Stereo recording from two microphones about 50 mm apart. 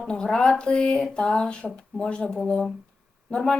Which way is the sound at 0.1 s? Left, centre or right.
Centre.